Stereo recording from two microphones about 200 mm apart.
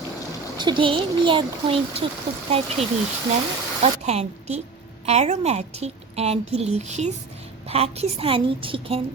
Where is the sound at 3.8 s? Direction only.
35° right (ahead or behind).